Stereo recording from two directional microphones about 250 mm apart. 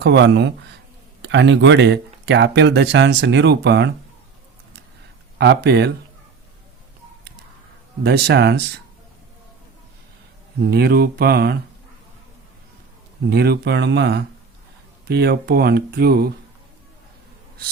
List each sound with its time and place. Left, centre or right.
0.0 s speech: right
5.4 s speech: right
8.0 s speech: right
10.6 s speech: right
13.3 s speech: right